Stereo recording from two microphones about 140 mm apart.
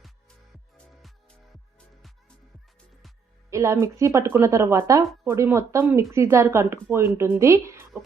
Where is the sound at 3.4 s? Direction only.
20° right (ahead or behind).